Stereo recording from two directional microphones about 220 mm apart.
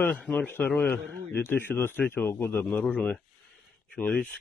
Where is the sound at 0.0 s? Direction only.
5° left (ahead or behind).